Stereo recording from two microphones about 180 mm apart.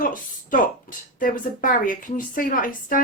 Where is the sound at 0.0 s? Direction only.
50° left (ahead or behind).